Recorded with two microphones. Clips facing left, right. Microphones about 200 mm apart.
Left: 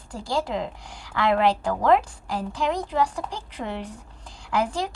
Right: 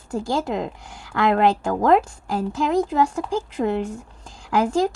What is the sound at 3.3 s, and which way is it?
A woman's voice, 45° right (ahead or behind).